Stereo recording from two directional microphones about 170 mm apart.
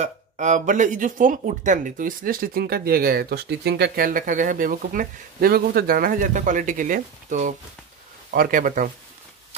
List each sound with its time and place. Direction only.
0.0 s speech: 45° right (ahead or behind)